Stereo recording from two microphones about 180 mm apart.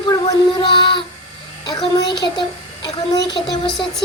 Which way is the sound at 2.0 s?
25° left (ahead or behind).